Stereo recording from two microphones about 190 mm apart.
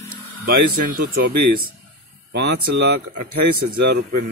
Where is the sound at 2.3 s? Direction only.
60° right (ahead or behind).